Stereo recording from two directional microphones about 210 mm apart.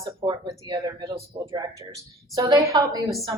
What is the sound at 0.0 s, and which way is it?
A woman's voice, 20° right (ahead or behind).